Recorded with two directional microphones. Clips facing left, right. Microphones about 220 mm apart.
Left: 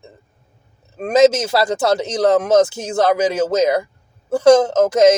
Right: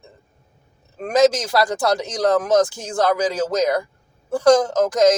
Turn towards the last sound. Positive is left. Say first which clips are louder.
# left 4 dB
turn(degrees=25)  # may be behind; listen again after turning